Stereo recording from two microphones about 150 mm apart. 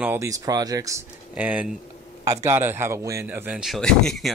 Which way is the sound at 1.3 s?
10° right (ahead or behind).